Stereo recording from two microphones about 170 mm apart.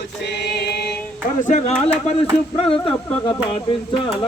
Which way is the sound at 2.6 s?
30° left (ahead or behind).